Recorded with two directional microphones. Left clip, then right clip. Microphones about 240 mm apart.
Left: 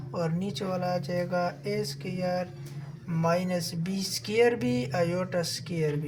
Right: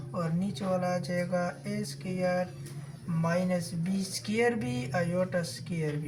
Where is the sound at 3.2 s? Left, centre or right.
Left.